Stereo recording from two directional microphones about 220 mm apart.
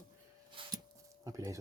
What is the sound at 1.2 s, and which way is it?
Speech, 15° right (ahead or behind).